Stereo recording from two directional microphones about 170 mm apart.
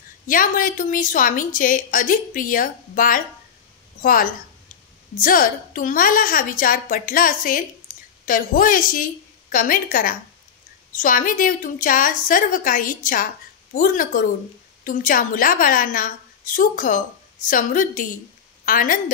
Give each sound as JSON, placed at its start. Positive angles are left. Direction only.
{"t": 0.3, "sound": "a woman's voice", "side_deg": 55}